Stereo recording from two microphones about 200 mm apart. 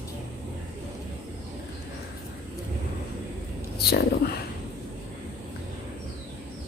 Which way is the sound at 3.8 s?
50° left (ahead or behind).